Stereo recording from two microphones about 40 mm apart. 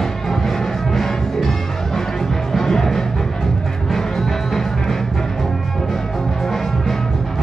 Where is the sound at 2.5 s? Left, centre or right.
Centre.